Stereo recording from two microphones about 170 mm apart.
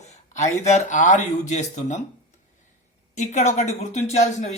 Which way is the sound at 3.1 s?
45° left (ahead or behind).